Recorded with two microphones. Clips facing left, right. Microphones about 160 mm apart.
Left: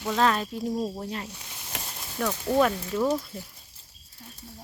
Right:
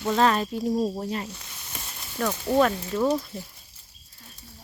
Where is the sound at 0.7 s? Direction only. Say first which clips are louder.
Right 5 dB; 20° right (ahead or behind).